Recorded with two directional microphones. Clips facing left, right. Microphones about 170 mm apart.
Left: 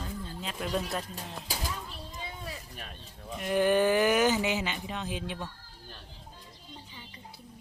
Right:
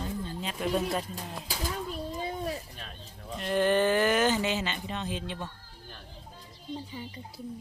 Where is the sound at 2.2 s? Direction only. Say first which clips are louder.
Right 7 dB; 45° right (ahead or behind).